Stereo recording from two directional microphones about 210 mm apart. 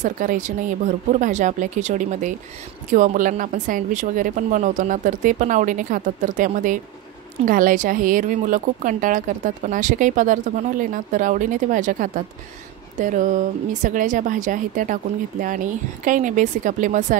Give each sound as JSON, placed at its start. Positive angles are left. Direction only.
{"t": 0.0, "sound": "speech", "side_deg": -35}